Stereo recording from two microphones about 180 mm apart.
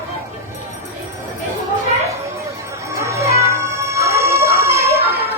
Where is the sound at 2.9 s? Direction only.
15° right (ahead or behind).